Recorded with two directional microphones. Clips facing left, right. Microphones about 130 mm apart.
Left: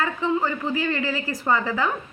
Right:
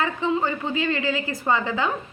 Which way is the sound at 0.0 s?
20° right (ahead or behind).